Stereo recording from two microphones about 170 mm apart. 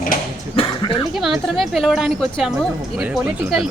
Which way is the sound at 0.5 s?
30° left (ahead or behind).